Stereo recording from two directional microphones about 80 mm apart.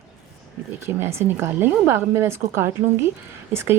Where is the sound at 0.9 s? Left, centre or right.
Right.